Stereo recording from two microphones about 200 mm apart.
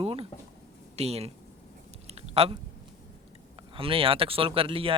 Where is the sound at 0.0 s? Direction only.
30° right (ahead or behind).